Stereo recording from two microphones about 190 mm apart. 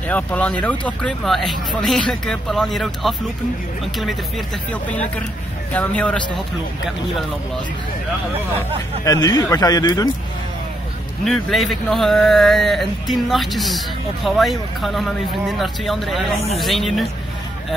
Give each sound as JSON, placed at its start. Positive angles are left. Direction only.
{"t": 0.1, "sound": "speech", "side_deg": 5}
{"t": 5.7, "sound": "speech", "side_deg": 5}
{"t": 8.5, "sound": "speech", "side_deg": 20}
{"t": 11.2, "sound": "speech", "side_deg": 0}